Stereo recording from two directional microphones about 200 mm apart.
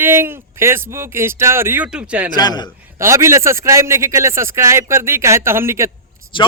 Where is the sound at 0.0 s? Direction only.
10° right (ahead or behind).